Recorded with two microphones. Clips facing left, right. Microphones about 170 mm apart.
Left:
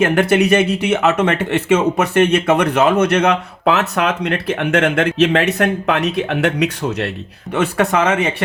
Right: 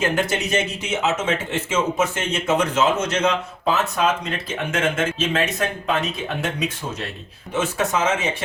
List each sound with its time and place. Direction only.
0.0 s speech: 60° left (ahead or behind)